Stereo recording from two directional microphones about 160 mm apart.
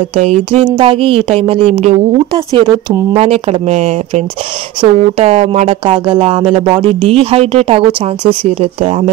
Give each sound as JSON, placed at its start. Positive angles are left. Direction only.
{"t": 0.1, "sound": "speech", "side_deg": -40}
{"t": 2.3, "sound": "speech", "side_deg": -25}
{"t": 3.2, "sound": "speech", "side_deg": -40}